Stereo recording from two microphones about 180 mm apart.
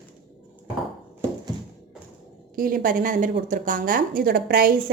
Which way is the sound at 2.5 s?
50° right (ahead or behind).